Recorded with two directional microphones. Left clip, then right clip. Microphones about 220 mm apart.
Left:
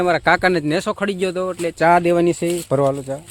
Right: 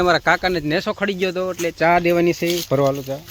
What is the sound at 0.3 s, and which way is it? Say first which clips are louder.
Speech: left 2 dB; 45° left (ahead or behind).